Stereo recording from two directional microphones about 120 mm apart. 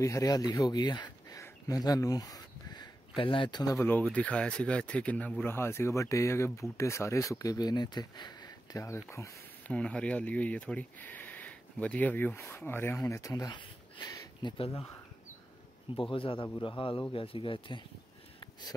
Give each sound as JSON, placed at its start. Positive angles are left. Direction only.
{"t": 0.0, "sound": "speech", "side_deg": 30}
{"t": 1.4, "sound": "a sound", "side_deg": 30}
{"t": 3.7, "sound": "speech", "side_deg": 15}
{"t": 9.7, "sound": "speech", "side_deg": 10}
{"t": 14.6, "sound": "speech", "side_deg": 50}
{"t": 16.0, "sound": "speech", "side_deg": 45}